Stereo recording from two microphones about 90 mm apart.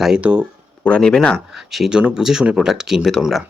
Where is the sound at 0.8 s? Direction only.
10° left (ahead or behind).